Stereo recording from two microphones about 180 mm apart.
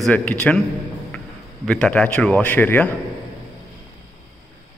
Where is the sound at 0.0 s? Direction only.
5° left (ahead or behind).